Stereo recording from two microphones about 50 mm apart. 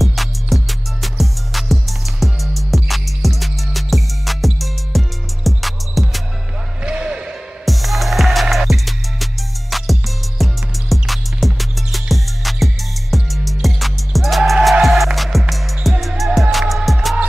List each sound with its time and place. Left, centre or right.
0.0 s music: centre
6.8 s music: right
7.6 s music: centre